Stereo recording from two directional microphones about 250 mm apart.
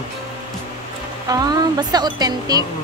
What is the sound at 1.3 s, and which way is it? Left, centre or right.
Speech, centre.